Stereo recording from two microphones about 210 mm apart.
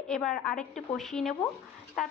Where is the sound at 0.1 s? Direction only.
Centre (ahead or behind).